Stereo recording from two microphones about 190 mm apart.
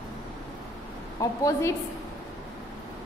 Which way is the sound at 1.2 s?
15° left (ahead or behind).